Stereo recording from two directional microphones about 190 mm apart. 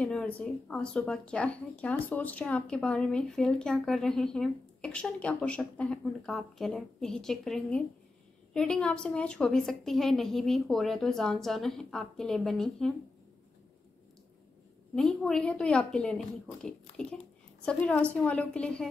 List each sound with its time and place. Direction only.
0.0 s speech: 5° left (ahead or behind)
15.0 s a woman's voice: 5° left (ahead or behind)